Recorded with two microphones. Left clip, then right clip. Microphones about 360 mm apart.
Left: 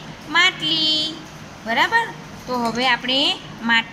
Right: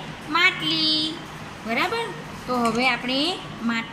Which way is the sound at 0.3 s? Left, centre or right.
Left.